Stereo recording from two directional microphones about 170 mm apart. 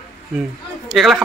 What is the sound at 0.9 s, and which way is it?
Speech, centre (ahead or behind).